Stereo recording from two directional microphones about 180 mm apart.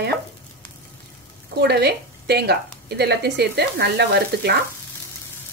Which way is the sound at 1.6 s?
65° right (ahead or behind).